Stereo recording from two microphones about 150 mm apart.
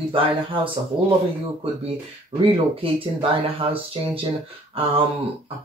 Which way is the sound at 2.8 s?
35° right (ahead or behind).